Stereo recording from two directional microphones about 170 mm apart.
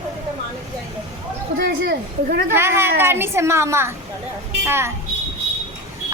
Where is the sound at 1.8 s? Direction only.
60° right (ahead or behind).